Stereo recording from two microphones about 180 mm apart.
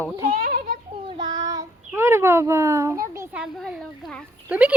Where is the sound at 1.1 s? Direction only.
25° right (ahead or behind).